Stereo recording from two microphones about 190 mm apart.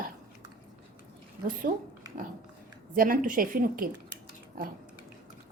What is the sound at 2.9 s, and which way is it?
Speech, 45° right (ahead or behind).